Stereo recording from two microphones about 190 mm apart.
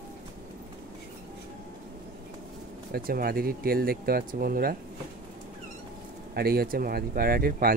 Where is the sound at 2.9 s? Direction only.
50° right (ahead or behind).